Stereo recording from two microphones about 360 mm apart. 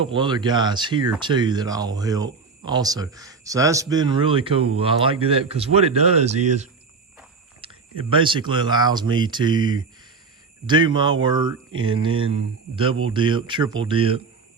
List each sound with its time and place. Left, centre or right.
0.0 s speech: centre
7.6 s a sound: centre
8.1 s speech: centre